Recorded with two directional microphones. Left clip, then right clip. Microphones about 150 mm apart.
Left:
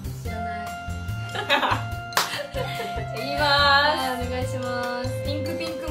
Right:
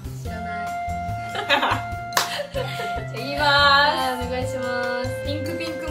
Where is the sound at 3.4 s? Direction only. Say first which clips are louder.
Right 3 dB; 20° right (ahead or behind).